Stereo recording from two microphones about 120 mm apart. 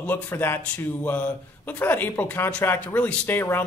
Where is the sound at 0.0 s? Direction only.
15° left (ahead or behind).